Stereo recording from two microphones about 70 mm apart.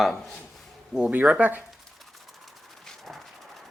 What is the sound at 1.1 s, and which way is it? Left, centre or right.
Speech, right.